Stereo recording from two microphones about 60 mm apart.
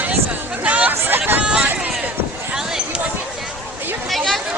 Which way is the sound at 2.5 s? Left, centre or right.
Centre.